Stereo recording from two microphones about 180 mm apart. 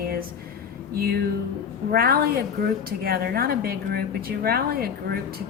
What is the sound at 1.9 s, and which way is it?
A woman's voice, 60° right (ahead or behind).